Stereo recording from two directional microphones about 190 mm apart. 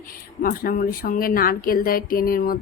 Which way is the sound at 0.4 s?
50° left (ahead or behind).